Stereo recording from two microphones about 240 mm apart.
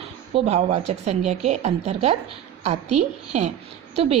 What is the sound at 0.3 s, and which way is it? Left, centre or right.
A woman's voice, right.